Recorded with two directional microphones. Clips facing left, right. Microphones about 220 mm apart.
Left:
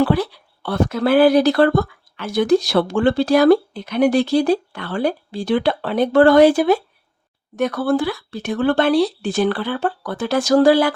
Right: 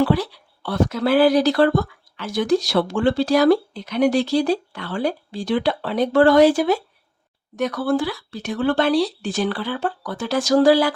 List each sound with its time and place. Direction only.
0.0 s speech: 55° left (ahead or behind)